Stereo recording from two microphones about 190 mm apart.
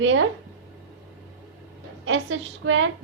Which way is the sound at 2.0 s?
80° right.